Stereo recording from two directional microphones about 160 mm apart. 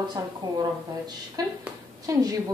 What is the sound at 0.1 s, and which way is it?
Speech, 25° right (ahead or behind).